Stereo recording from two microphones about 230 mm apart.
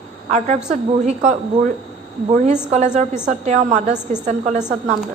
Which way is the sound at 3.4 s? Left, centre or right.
Right.